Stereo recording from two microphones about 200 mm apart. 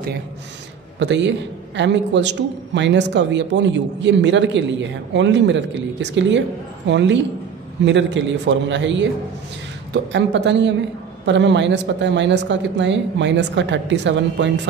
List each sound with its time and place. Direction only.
0.9 s speech: 65° right (ahead or behind)
10.1 s speech: 60° right (ahead or behind)